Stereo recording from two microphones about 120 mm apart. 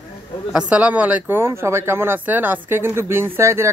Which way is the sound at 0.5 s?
10° right (ahead or behind).